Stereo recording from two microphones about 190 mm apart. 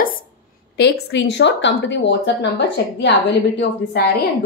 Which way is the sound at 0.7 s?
65° left (ahead or behind).